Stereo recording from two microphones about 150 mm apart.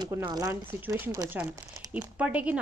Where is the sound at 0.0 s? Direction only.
25° right (ahead or behind).